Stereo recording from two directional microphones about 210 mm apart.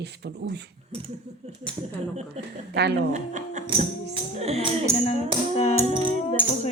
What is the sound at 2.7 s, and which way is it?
Speech, 50° right (ahead or behind).